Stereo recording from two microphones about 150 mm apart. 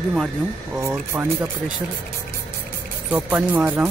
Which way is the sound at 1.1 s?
15° right (ahead or behind).